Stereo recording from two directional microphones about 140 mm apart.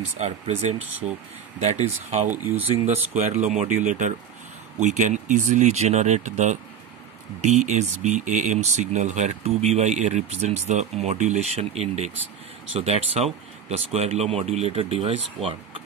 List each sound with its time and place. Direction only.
0.2 s speech: 50° right (ahead or behind)
2.3 s speech: 15° right (ahead or behind)
3.1 s speech: 55° right (ahead or behind)